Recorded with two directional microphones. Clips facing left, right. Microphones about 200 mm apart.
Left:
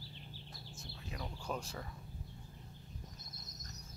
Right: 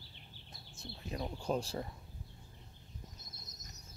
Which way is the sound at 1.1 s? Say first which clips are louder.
Right 6 dB; 30° right (ahead or behind).